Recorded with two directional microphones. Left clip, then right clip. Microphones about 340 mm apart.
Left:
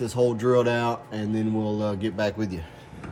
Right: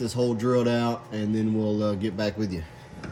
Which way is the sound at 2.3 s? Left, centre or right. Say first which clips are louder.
Even; left.